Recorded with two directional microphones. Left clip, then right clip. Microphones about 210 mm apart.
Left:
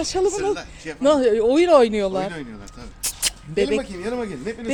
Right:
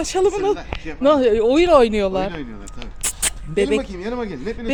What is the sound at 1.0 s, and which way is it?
Speech, 5° left (ahead or behind).